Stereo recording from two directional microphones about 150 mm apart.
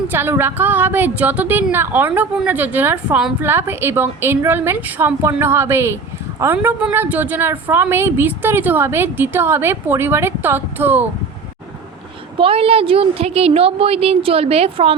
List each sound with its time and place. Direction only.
0.1 s a woman's voice: 15° right (ahead or behind)
12.4 s a woman's voice: 40° right (ahead or behind)